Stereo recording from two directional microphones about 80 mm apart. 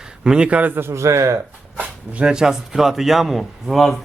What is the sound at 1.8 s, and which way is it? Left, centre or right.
Speech, centre.